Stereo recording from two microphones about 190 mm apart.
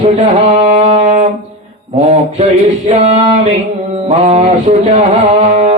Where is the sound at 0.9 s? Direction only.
40° right (ahead or behind).